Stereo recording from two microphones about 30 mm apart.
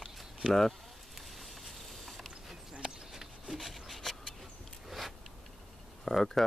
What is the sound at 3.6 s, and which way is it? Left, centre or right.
Rub, centre.